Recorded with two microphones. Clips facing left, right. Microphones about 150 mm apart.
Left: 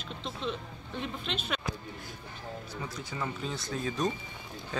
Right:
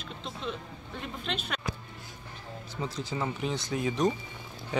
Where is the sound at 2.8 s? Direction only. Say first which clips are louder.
Right 6 dB; 25° right (ahead or behind).